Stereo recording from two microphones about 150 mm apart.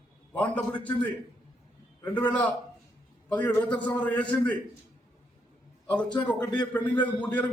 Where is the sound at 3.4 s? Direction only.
25° left (ahead or behind).